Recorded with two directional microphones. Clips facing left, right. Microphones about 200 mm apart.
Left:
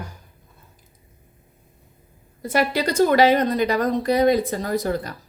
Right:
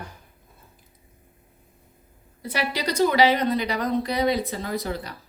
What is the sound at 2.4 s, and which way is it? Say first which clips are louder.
A woman's voice: left 7 dB; 50° left (ahead or behind).